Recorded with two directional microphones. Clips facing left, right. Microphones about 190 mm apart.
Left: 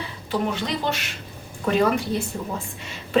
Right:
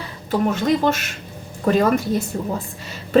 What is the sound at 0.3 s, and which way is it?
A woman's voice, 45° right (ahead or behind).